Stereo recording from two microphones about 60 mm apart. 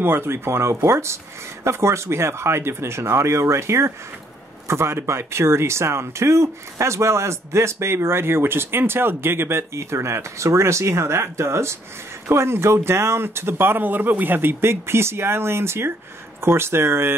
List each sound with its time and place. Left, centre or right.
0.0 s speech: right